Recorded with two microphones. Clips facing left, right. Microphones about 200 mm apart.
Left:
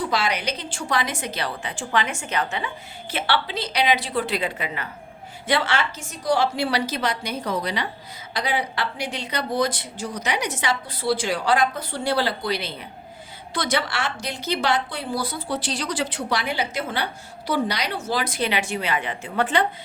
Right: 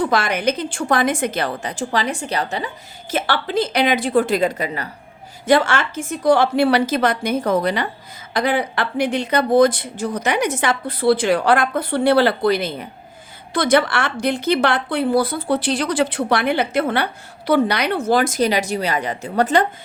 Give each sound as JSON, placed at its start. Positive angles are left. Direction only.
{"t": 0.0, "sound": "a woman's voice", "side_deg": -50}